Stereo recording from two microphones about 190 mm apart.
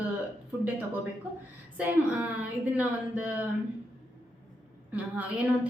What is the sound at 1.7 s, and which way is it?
A woman's voice, 10° right (ahead or behind).